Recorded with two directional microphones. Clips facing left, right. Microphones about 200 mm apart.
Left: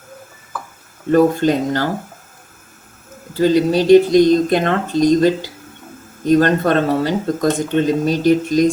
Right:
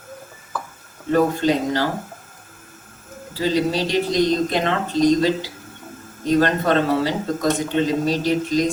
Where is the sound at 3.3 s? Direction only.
50° left (ahead or behind).